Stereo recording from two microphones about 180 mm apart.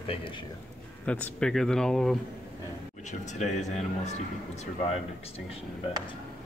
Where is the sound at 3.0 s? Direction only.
40° left (ahead or behind).